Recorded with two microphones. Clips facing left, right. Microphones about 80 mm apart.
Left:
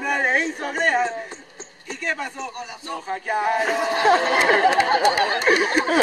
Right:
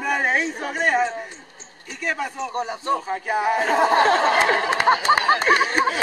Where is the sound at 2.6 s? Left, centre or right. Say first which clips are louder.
Right 9 dB; right.